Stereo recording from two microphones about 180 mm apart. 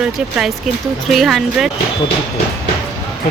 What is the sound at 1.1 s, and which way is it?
Speech, centre (ahead or behind).